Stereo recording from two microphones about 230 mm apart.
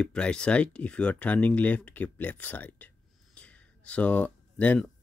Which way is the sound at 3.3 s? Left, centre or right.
Centre.